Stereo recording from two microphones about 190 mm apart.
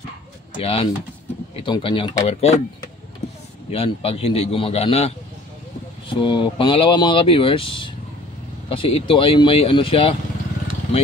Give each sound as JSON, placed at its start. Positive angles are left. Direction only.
{"t": 0.6, "sound": "a man's voice", "side_deg": 30}
{"t": 3.7, "sound": "a man's voice", "side_deg": 30}